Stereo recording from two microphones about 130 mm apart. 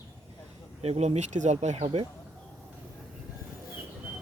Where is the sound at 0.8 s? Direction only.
55° right (ahead or behind).